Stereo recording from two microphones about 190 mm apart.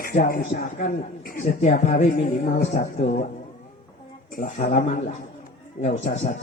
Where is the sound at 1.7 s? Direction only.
35° left (ahead or behind).